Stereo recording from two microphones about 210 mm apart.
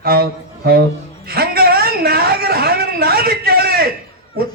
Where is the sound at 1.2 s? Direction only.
45° right (ahead or behind).